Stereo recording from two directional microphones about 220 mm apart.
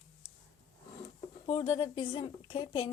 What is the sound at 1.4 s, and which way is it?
Speech, 20° left (ahead or behind).